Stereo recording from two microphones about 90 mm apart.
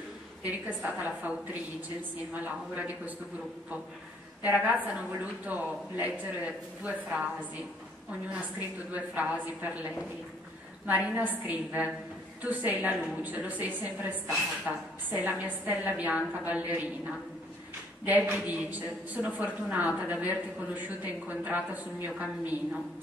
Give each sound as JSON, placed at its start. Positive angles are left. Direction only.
{"t": 0.7, "sound": "a woman's voice", "side_deg": -15}
{"t": 4.4, "sound": "a woman's voice", "side_deg": -15}
{"t": 8.4, "sound": "a woman's voice", "side_deg": -15}
{"t": 10.9, "sound": "a woman's voice", "side_deg": -15}
{"t": 18.0, "sound": "a woman's voice", "side_deg": -15}